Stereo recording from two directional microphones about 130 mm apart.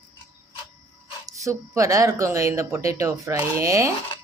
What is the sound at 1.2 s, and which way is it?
Speech, 25° right (ahead or behind).